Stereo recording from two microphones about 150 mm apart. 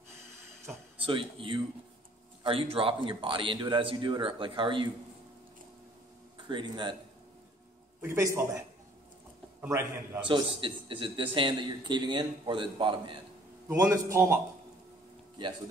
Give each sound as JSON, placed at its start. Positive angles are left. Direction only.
{"t": 1.0, "sound": "a man's voice", "side_deg": -35}
{"t": 6.3, "sound": "speech", "side_deg": -30}
{"t": 8.0, "sound": "a man's voice", "side_deg": -20}
{"t": 10.2, "sound": "a man's voice", "side_deg": -35}
{"t": 13.7, "sound": "a man's voice", "side_deg": -20}